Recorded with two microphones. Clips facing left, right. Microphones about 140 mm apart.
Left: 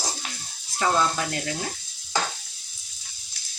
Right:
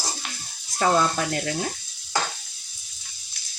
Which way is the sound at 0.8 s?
40° right (ahead or behind).